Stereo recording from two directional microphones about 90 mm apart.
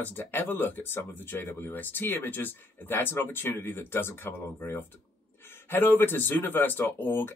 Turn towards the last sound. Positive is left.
turn(degrees=20)  # may be behind; listen again after turning